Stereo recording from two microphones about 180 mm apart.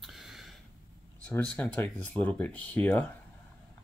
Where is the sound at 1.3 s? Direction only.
10° left (ahead or behind).